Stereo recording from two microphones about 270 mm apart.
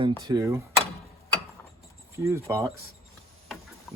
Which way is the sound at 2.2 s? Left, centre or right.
Centre.